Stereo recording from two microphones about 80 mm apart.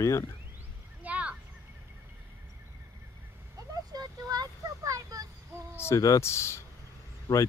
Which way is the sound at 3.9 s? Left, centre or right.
Right.